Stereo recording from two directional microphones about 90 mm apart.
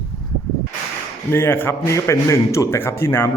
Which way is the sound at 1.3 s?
25° left (ahead or behind).